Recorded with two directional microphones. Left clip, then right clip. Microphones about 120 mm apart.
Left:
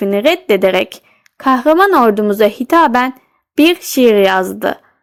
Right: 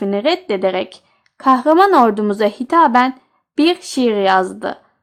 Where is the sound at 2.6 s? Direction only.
30° left (ahead or behind).